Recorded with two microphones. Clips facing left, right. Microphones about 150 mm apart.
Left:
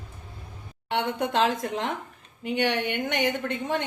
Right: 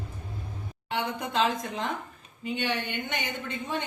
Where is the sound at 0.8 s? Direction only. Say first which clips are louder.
Left 5 dB; 70° left (ahead or behind).